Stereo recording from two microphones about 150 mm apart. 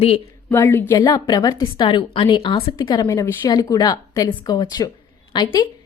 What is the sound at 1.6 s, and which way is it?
A woman's voice, 35° left (ahead or behind).